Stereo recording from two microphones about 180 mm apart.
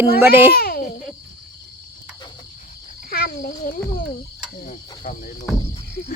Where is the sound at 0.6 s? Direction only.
55° left (ahead or behind).